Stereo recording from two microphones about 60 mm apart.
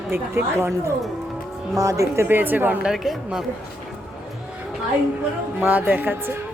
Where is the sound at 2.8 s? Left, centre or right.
Centre.